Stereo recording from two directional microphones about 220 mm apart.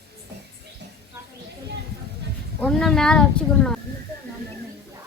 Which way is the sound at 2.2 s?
50° right (ahead or behind).